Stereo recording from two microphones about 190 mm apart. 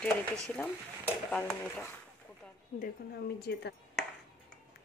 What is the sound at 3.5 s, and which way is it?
Speech, 65° left (ahead or behind).